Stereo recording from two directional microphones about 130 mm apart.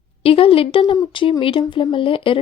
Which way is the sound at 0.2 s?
45° left (ahead or behind).